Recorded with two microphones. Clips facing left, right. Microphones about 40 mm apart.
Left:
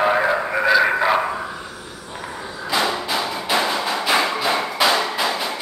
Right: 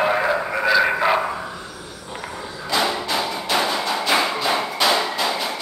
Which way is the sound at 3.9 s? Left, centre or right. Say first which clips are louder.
Left 1 dB; centre.